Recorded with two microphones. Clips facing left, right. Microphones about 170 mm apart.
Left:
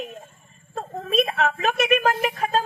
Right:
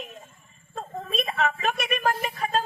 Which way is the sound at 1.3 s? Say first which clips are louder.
Left 3 dB; 55° left (ahead or behind).